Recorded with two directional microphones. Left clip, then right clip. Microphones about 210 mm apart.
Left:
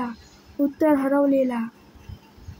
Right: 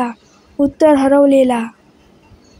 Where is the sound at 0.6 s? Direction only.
35° right (ahead or behind).